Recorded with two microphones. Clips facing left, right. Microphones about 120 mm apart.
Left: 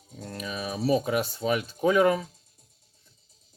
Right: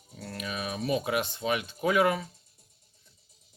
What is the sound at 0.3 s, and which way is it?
Speech, 35° left (ahead or behind).